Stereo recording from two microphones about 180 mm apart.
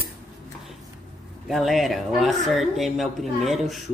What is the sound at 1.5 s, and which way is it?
Speech, centre (ahead or behind).